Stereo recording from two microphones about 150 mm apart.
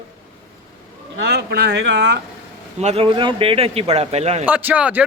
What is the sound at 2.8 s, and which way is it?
Speech, 40° right (ahead or behind).